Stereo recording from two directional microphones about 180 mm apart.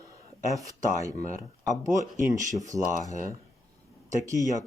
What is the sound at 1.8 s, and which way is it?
Speech, 15° right (ahead or behind).